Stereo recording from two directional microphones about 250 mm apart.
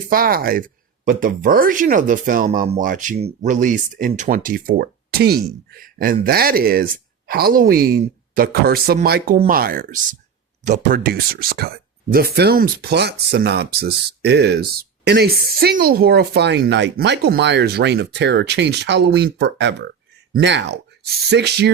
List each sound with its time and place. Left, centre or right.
0.1 s speech: right